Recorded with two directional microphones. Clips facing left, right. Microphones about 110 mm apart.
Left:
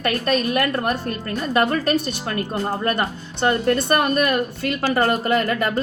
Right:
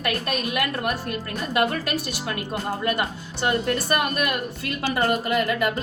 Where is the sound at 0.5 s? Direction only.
40° left (ahead or behind).